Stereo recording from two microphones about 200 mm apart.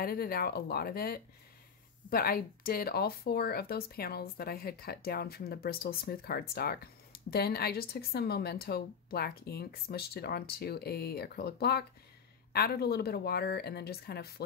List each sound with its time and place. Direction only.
0.0 s speech: 50° left (ahead or behind)